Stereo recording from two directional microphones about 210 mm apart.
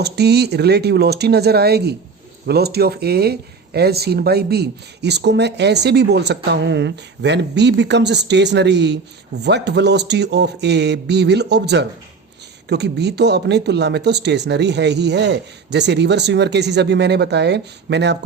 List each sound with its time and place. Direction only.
0.0 s speech: 50° right (ahead or behind)